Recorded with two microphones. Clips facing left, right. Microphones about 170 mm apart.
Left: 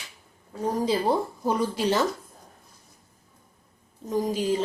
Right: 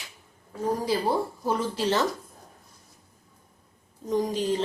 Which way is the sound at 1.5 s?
15° left (ahead or behind).